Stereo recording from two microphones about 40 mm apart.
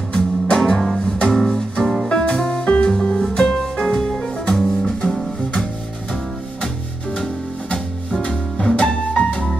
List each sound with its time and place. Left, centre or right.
0.1 s music: centre
2.0 s music: left
7.7 s music: left